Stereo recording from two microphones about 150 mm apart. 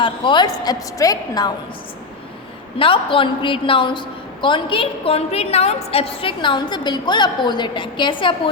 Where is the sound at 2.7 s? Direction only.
35° left (ahead or behind).